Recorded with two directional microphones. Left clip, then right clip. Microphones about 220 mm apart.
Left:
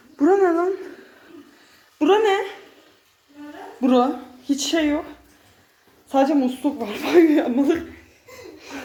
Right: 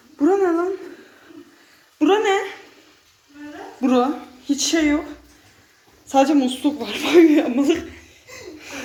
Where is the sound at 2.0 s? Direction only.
20° left (ahead or behind).